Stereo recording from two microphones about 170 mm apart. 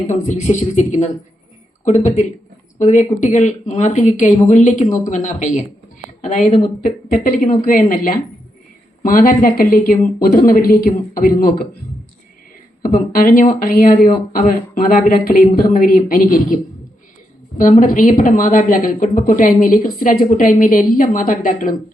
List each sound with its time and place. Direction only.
0.1 s a woman's voice: 40° left (ahead or behind)
2.7 s a woman's voice: 45° left (ahead or behind)
12.9 s a woman's voice: 55° left (ahead or behind)
17.6 s a woman's voice: 55° left (ahead or behind)